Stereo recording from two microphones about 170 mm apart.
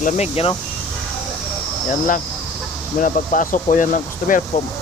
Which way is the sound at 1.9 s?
50° left (ahead or behind).